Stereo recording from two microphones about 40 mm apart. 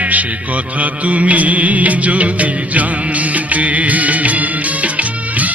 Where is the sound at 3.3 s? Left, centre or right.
Right.